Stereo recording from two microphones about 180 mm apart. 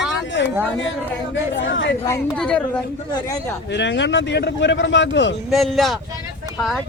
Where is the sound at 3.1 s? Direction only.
20° left (ahead or behind).